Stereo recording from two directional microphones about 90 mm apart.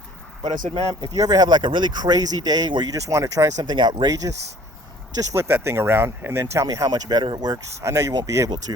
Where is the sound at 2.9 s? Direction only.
35° right (ahead or behind).